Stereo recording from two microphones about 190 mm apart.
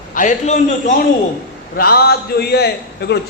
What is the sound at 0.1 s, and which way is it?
Speech, 40° left (ahead or behind).